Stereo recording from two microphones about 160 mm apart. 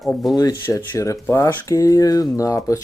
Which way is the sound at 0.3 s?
20° left (ahead or behind).